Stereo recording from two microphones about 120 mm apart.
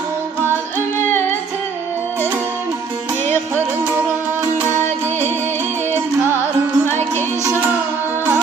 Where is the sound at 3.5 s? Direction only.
20° right (ahead or behind).